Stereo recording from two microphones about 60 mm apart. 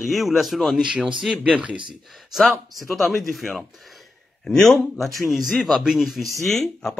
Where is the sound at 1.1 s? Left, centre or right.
Centre.